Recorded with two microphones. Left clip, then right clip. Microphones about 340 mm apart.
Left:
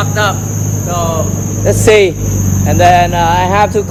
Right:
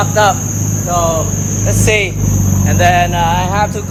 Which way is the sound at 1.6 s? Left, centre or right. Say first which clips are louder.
Left 7 dB; left.